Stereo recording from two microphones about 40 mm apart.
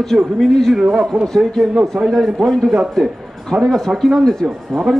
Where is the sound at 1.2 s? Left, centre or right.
Centre.